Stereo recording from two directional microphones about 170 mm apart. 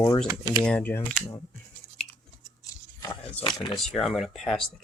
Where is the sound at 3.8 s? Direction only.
Centre (ahead or behind).